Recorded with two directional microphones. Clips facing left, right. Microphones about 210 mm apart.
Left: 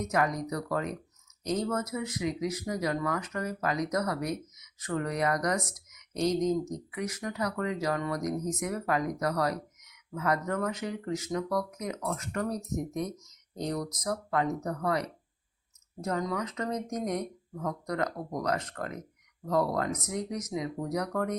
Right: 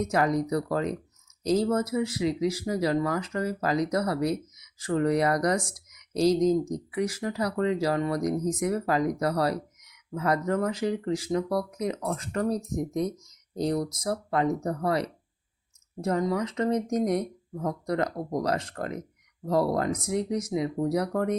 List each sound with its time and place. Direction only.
0.1 s speech: 30° right (ahead or behind)